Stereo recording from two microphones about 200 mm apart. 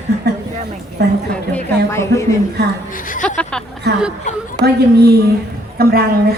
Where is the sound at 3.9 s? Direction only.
55° right (ahead or behind).